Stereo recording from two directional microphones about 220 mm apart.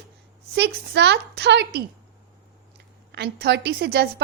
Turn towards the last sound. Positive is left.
turn(degrees=-50)  # may be behind; listen again after turning